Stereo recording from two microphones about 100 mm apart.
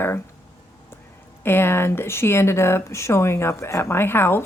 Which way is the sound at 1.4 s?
25° left (ahead or behind).